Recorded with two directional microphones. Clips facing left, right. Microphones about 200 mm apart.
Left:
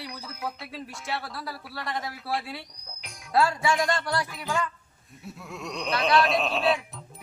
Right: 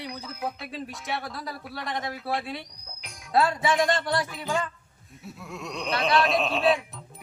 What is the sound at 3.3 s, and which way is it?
Speech, 20° right (ahead or behind).